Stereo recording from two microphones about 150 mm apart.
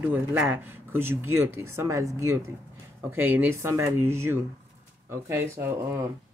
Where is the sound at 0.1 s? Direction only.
10° right (ahead or behind).